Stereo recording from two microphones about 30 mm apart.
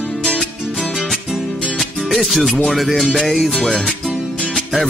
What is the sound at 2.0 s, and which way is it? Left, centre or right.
Music, centre.